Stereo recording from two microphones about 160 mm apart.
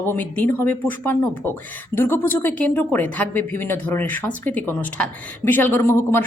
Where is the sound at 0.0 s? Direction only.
15° left (ahead or behind).